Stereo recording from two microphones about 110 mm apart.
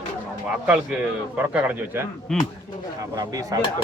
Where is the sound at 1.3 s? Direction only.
15° right (ahead or behind).